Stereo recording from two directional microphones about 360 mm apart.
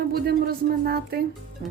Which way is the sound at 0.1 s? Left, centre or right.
Right.